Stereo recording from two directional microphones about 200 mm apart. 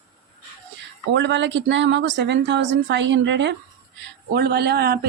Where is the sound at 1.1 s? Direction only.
65° right (ahead or behind).